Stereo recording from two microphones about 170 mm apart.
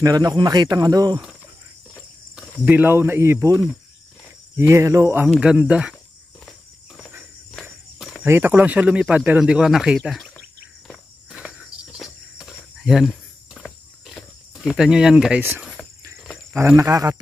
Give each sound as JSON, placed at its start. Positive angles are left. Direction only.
{"t": 0.0, "sound": "speech", "side_deg": -20}
{"t": 2.6, "sound": "speech", "side_deg": -10}
{"t": 5.2, "sound": "speech", "side_deg": -5}
{"t": 7.6, "sound": "walk", "side_deg": -5}
{"t": 8.3, "sound": "speech", "side_deg": -10}
{"t": 10.9, "sound": "insect", "side_deg": -5}
{"t": 12.0, "sound": "a sound", "side_deg": 0}
{"t": 15.4, "sound": "cricket", "side_deg": -10}
{"t": 16.5, "sound": "speech", "side_deg": -15}